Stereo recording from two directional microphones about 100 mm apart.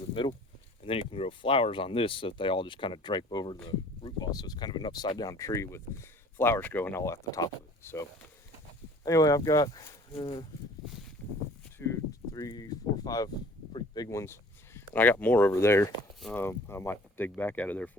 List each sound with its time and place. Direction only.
0.1 s speech: 55° left (ahead or behind)
0.8 s speech: 70° left (ahead or behind); by 7.0 s 20° left (ahead or behind)
7.0 s speech: 30° left (ahead or behind)
9.0 s speech: 35° left (ahead or behind)
10.1 s speech: 60° left (ahead or behind)
12.3 s speech: 40° left (ahead or behind)
14.2 s speech: 25° left (ahead or behind)